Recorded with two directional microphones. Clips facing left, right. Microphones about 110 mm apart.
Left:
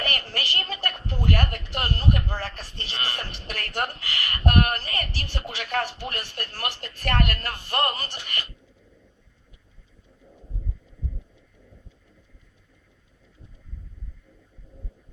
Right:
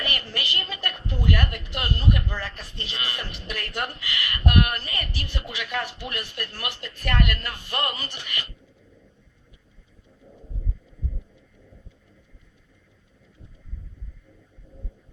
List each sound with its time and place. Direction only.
0.0 s a woman's voice: 40° left (ahead or behind)